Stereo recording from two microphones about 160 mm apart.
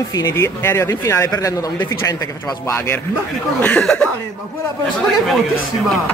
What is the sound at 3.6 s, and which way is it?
Gasp, 5° left (ahead or behind).